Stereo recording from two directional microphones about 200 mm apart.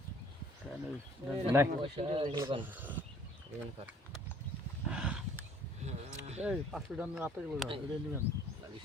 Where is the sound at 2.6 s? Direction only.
10° right (ahead or behind).